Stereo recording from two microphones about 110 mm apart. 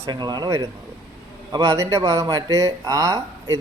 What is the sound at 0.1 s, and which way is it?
Speech, 40° right (ahead or behind).